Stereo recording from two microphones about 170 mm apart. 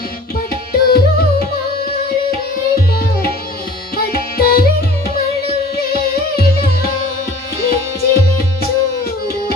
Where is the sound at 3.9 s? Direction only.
65° left (ahead or behind).